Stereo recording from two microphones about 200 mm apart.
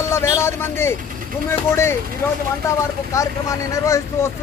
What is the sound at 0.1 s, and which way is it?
Speech, 15° left (ahead or behind).